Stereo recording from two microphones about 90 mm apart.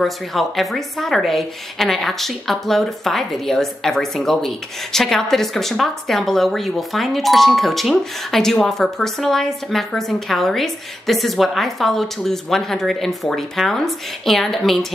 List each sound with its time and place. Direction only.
0.0 s speech: centre (ahead or behind)